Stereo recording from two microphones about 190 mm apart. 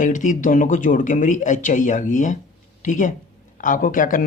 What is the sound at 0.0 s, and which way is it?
Speech, 40° left (ahead or behind).